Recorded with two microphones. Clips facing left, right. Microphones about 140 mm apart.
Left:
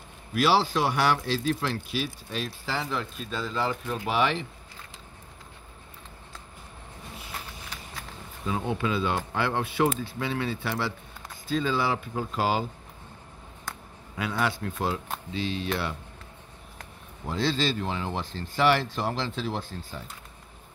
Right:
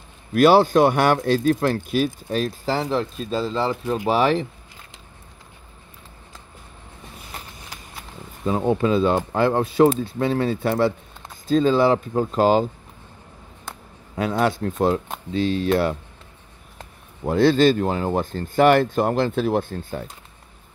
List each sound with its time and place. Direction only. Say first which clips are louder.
0.3 s speech: right 9 dB; 50° right (ahead or behind)
8.5 s speech: right 9 dB; 40° right (ahead or behind)
14.4 s speech: right 8 dB; 45° right (ahead or behind)
17.2 s speech: right 11 dB; 55° right (ahead or behind)